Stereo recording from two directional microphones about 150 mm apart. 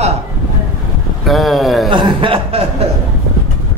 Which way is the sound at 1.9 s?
35° right (ahead or behind).